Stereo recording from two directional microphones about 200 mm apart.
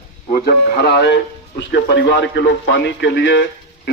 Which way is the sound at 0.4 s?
55° left (ahead or behind).